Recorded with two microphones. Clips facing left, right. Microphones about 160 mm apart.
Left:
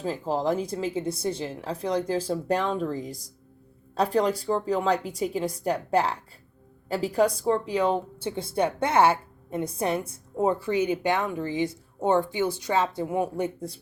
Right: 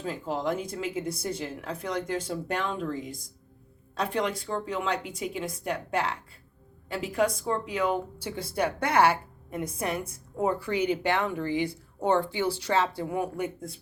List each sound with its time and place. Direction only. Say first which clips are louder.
0.0 s speech: left 4 dB; 35° left (ahead or behind)